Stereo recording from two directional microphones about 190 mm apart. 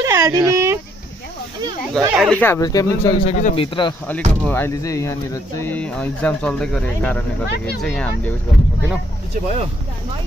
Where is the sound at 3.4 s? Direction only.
30° left (ahead or behind).